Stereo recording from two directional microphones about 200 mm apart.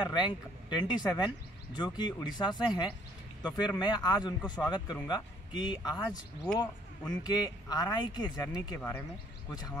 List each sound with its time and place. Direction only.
0.0 s speech: 25° left (ahead or behind)